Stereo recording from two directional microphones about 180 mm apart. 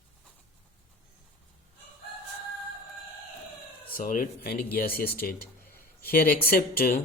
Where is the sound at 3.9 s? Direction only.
50° left (ahead or behind).